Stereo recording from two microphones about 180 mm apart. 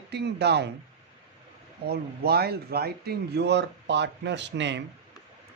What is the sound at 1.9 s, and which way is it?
Speech, 60° right (ahead or behind).